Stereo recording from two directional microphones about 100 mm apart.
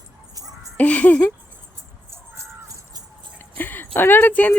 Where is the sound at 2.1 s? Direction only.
30° right (ahead or behind).